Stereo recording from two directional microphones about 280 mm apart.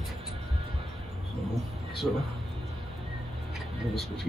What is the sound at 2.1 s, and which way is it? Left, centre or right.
Speech, centre.